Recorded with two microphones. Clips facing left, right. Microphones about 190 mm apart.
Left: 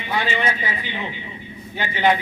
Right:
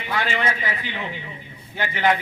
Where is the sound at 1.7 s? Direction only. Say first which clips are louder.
Left 2 dB; 20° left (ahead or behind).